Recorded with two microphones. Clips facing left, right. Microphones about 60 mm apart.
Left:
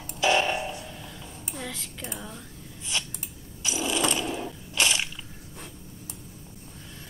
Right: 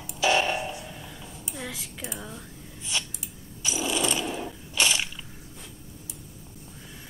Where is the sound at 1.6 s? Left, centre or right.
Centre.